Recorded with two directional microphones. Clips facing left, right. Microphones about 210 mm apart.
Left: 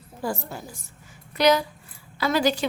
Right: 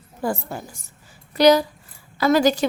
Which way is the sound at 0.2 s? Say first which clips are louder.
Right 4 dB; 55° right (ahead or behind).